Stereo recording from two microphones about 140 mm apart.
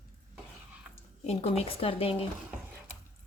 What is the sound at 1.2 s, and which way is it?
Speech, 50° left (ahead or behind).